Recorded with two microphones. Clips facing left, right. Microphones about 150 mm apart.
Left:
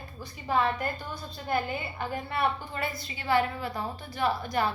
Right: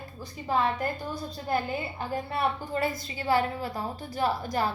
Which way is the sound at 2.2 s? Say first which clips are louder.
Left 1 dB; 35° right (ahead or behind).